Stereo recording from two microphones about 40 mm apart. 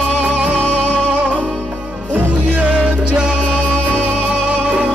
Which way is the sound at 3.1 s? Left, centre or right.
Centre.